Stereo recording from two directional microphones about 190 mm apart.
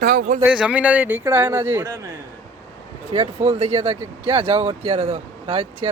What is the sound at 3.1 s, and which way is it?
Speech, 30° right (ahead or behind).